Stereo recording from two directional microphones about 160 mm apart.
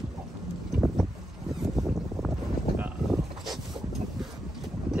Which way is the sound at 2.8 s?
5° right (ahead or behind).